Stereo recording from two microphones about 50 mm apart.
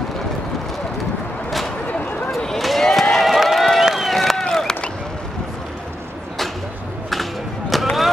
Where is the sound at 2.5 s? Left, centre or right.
Centre.